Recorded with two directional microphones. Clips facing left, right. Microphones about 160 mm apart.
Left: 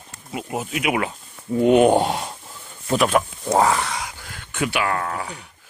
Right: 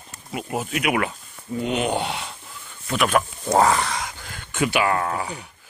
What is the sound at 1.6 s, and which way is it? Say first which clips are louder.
Speech: left 10 dB; 50° left (ahead or behind).